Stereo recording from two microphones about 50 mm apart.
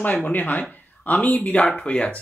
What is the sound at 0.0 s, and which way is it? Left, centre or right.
A man's voice, left.